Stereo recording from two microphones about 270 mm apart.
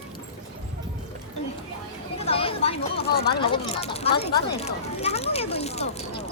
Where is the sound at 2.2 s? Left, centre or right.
Left.